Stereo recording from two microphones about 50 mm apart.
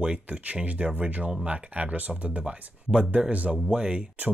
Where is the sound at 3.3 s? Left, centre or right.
Right.